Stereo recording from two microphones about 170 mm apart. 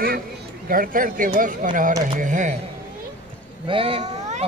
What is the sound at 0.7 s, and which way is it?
Speech, 55° right (ahead or behind).